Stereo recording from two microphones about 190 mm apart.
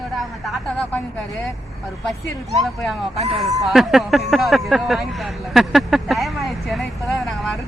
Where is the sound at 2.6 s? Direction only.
Centre (ahead or behind).